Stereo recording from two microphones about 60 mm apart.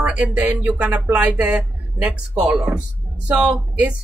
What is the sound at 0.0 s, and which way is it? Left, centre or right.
A woman's voice, right.